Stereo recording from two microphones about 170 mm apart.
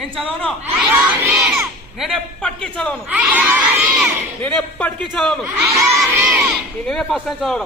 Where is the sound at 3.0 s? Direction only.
10° right (ahead or behind).